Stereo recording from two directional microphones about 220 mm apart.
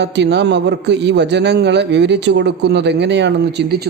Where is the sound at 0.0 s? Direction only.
50° right (ahead or behind).